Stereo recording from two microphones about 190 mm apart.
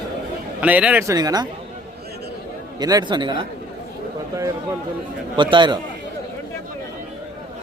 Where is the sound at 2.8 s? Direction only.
20° right (ahead or behind).